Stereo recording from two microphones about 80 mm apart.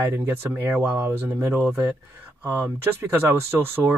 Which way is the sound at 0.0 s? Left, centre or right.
Right.